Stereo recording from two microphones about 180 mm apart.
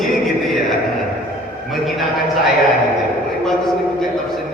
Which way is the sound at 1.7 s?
Centre (ahead or behind).